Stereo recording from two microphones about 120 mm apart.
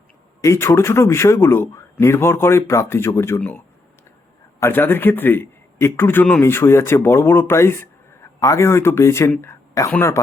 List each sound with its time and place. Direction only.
0.4 s a man's voice: 25° left (ahead or behind)
4.6 s a man's voice: 15° left (ahead or behind)